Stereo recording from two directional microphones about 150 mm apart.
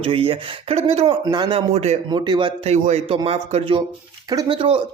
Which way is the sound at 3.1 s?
40° right (ahead or behind).